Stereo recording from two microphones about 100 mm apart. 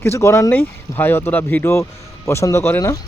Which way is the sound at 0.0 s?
25° left (ahead or behind).